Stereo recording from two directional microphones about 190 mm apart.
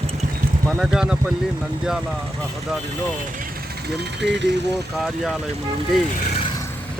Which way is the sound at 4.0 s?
65° right (ahead or behind).